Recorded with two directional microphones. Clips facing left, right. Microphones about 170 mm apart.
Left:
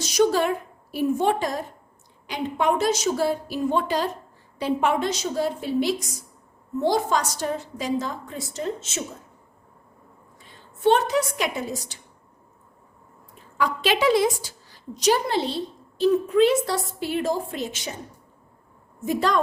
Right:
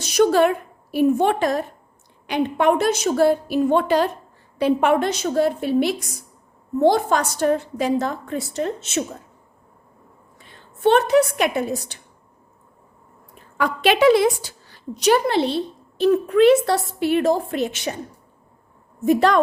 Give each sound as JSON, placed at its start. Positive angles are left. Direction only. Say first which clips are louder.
{"t": 0.0, "sound": "a woman's voice", "louder": "right 4 dB", "side_deg": -60}
{"t": 10.4, "sound": "a woman's voice", "louder": "right 2 dB", "side_deg": -65}
{"t": 13.6, "sound": "a woman's voice", "louder": "right 5 dB", "side_deg": -60}
{"t": 19.0, "sound": "a woman's voice", "louder": "right 6 dB", "side_deg": -65}